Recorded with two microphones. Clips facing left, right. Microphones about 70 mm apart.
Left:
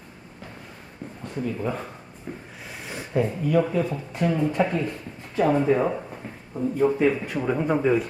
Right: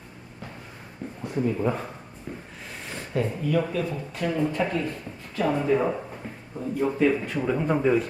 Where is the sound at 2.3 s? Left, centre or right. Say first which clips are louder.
Left 1 dB; centre.